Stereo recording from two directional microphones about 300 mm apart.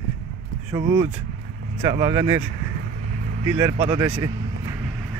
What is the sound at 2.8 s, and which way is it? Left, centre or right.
Vehicle, right.